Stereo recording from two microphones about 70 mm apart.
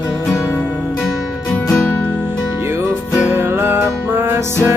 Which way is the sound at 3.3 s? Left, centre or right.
Right.